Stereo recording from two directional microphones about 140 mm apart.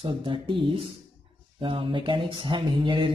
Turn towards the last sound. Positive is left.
turn(degrees=-35)  # may be behind; listen again after turning